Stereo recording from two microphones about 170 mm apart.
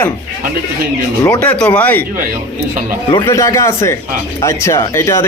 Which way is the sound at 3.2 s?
20° left (ahead or behind).